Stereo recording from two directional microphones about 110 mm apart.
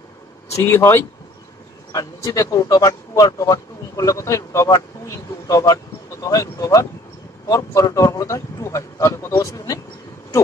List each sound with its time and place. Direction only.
0.6 s a man's voice: 20° left (ahead or behind)
1.9 s a man's voice: 35° left (ahead or behind)